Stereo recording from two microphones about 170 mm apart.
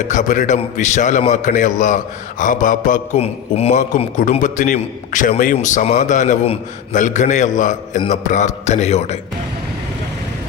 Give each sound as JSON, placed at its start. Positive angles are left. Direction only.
{"t": 0.0, "sound": "a man's voice", "side_deg": 45}
{"t": 3.2, "sound": "a man's voice", "side_deg": 40}